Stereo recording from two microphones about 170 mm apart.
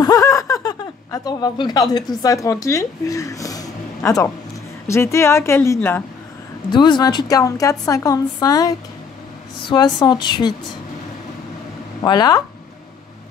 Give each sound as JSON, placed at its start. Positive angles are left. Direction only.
{"t": 0.0, "sound": "a sound", "side_deg": 20}
{"t": 4.8, "sound": "speech", "side_deg": 15}
{"t": 6.7, "sound": "a woman's voice", "side_deg": 25}
{"t": 12.0, "sound": "a woman's voice", "side_deg": 25}